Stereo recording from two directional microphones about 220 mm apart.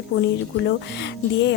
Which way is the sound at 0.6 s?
50° left (ahead or behind).